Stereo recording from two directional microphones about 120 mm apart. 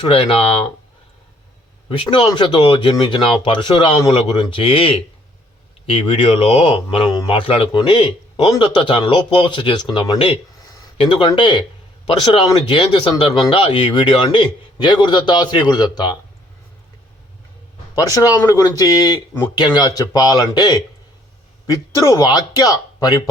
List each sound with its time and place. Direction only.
0.1 s speech: 50° left (ahead or behind)
1.9 s a man's voice: 45° left (ahead or behind)
18.4 s a man's voice: 30° left (ahead or behind)